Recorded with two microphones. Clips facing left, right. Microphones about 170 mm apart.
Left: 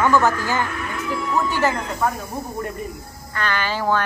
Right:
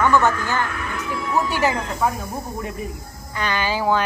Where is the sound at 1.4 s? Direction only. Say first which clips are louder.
Even; 10° right (ahead or behind).